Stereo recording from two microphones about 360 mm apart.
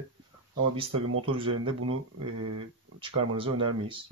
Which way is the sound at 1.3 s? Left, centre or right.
Centre.